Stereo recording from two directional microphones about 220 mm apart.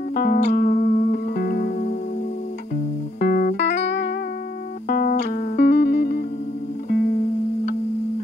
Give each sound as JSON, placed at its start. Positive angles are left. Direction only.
{"t": 0.1, "sound": "music", "side_deg": 40}
{"t": 3.2, "sound": "music", "side_deg": 40}
{"t": 4.8, "sound": "music", "side_deg": 40}